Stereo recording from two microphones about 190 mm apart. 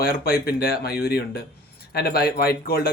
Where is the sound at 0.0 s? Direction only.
50° left (ahead or behind).